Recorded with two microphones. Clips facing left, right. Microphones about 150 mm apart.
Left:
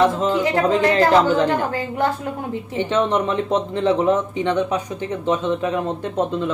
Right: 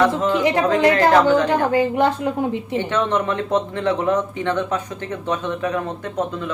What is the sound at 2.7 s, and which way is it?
Speech, 20° left (ahead or behind).